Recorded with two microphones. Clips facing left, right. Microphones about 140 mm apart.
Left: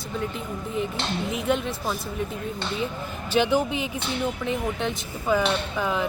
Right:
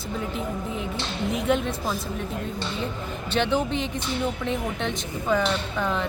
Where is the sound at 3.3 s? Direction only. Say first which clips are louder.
Left 2 dB; 10° left (ahead or behind).